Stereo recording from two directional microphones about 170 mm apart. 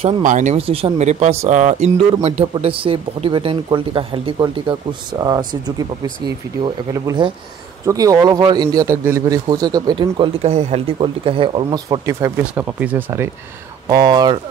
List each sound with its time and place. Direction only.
0.2 s a man's voice: 45° right (ahead or behind); by 5.4 s 25° right (ahead or behind)
6.6 s a man's voice: 25° right (ahead or behind)